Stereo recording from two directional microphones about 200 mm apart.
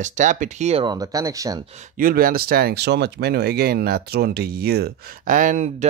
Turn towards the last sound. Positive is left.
turn(degrees=-40)  # may be behind; listen again after turning